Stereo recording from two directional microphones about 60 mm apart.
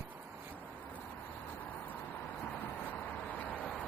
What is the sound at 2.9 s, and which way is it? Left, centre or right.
Vehicle, left.